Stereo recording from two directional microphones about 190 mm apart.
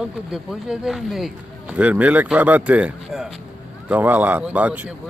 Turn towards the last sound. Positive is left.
turn(degrees=-5)  # may be behind; listen again after turning